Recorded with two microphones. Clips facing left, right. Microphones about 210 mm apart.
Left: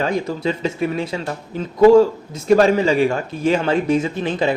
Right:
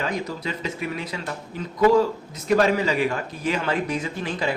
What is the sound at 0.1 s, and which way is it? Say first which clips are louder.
Speech: left 7 dB; 30° left (ahead or behind).